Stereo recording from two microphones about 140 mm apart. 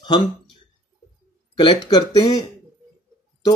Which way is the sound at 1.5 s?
30° left (ahead or behind).